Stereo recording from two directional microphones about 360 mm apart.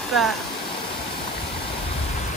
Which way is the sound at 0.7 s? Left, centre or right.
Centre.